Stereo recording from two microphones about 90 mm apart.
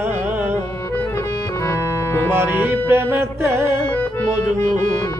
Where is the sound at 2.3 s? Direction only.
20° right (ahead or behind).